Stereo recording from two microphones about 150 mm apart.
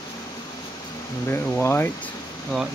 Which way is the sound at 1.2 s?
15° left (ahead or behind).